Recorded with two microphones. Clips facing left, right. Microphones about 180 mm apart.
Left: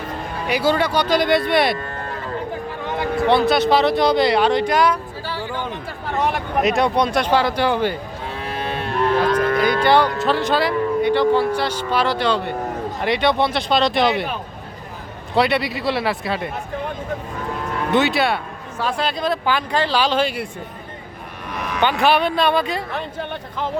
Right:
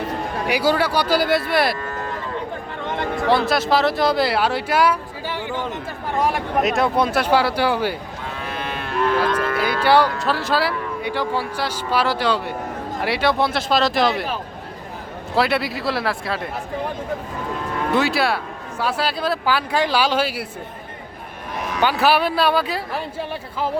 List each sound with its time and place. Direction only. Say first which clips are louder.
0.4 s speech: left 1 dB; 10° right (ahead or behind)
2.8 s speech: left 2 dB; centre (ahead or behind)
5.3 s a sound: even; 20° right (ahead or behind)
6.1 s speech: even; 5° right (ahead or behind)
8.8 s a sound: left 1 dB; 35° left (ahead or behind)
9.6 s speech: right 1 dB; 10° right (ahead or behind)
15.4 s speech: left 2 dB; centre (ahead or behind)
17.9 s speech: left 2 dB; centre (ahead or behind)
21.8 s speech: left 1 dB; 5° right (ahead or behind)